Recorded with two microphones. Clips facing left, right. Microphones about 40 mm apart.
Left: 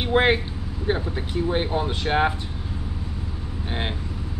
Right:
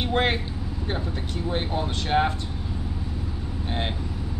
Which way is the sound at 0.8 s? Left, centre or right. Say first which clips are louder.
Left 6 dB; centre.